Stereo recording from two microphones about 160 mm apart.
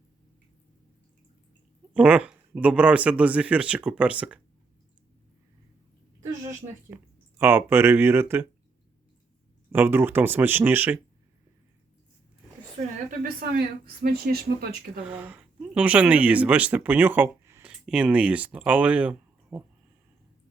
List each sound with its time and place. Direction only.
1.9 s speech: 10° right (ahead or behind)
6.9 s speech: 15° right (ahead or behind)
9.7 s speech: 15° right (ahead or behind)
13.1 s speech: 65° right (ahead or behind)
15.0 s speech: 10° right (ahead or behind)